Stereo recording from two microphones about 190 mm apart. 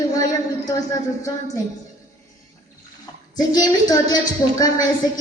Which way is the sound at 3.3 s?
20° left (ahead or behind).